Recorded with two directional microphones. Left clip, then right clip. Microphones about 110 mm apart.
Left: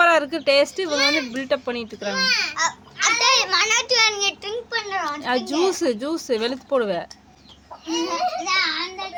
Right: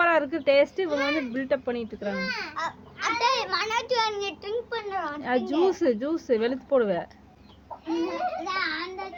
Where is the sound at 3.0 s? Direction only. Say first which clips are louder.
Left 7 dB; 45° left (ahead or behind).